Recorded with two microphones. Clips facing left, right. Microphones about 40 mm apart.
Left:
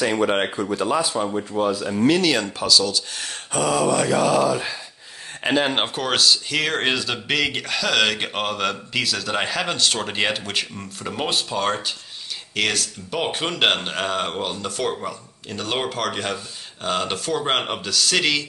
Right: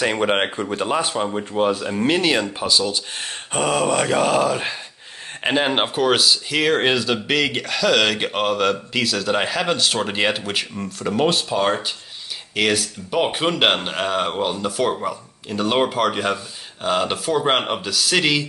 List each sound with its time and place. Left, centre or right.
0.0 s speech: right
5.4 s speech: centre